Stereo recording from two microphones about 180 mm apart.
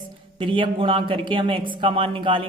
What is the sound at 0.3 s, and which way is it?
Speech, 30° right (ahead or behind).